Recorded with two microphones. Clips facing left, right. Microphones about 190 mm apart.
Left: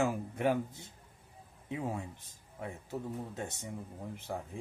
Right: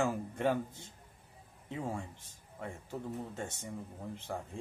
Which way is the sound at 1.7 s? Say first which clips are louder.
Left 2 dB; 15° left (ahead or behind).